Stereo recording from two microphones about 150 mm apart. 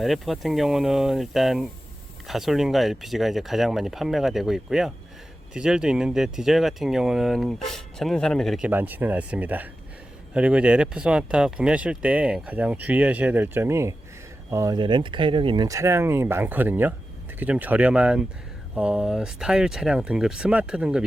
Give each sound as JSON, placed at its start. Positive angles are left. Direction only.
{"t": 0.0, "sound": "speech", "side_deg": 0}
{"t": 14.8, "sound": "speech", "side_deg": -30}